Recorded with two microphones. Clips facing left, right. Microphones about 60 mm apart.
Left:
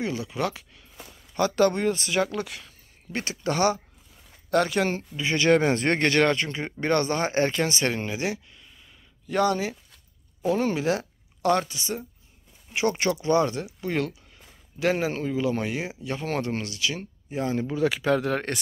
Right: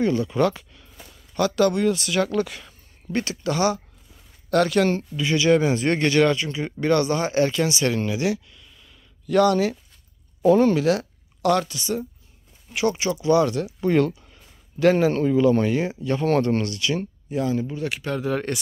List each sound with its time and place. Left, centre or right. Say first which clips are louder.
0.0 s speech: right 8 dB; centre
1.5 s speech: right 2 dB; left
2.2 s speech: right 6 dB; centre
3.4 s speech: even; left
4.5 s speech: right 4 dB; left
5.2 s speech: right 2 dB; left
5.5 s speech: right 1 dB; left; by 9.8 s centre
10.4 s speech: right 8 dB; centre
10.7 s speech: right 5 dB; left
12.9 s speech: even; left
13.3 s speech: right 4 dB; left
13.7 s speech: right 8 dB; centre
17.3 s speech: right 4 dB; left
18.2 s speech: right 2 dB; left